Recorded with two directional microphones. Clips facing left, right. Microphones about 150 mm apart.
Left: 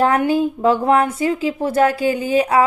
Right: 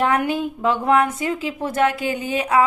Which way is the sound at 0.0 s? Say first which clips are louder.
Left 4 dB; 35° left (ahead or behind).